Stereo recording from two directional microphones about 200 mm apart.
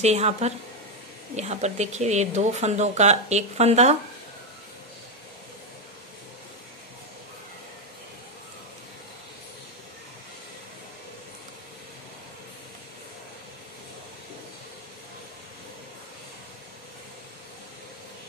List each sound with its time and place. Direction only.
0.0 s speech: 35° right (ahead or behind)